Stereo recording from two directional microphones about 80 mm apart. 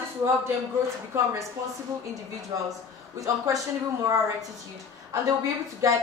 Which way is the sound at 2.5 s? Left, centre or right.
Right.